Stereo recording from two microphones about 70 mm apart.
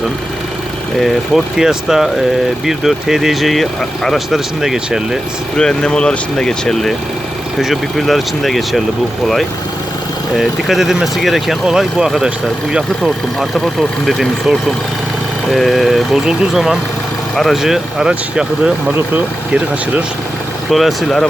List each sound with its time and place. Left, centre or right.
0.9 s speech: centre
5.5 s speech: centre
17.3 s speech: centre
18.1 s speech: centre
20.7 s speech: centre